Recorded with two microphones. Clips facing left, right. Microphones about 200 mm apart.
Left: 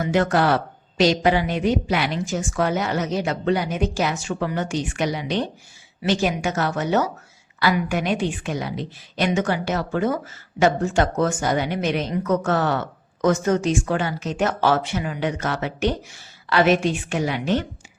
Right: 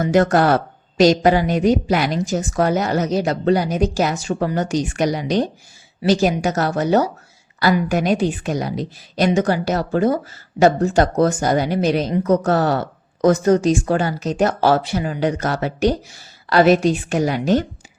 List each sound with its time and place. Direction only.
0.0 s a woman's voice: 40° right (ahead or behind)